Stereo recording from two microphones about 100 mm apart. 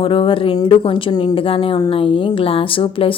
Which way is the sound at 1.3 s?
65° left (ahead or behind).